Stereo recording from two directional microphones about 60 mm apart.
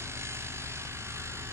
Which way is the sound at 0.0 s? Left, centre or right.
Right.